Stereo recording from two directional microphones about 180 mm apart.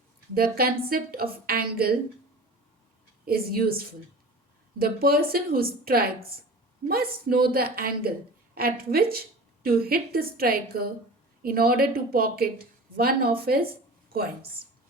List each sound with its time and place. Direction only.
0.3 s speech: 55° right (ahead or behind)
3.2 s speech: 55° right (ahead or behind)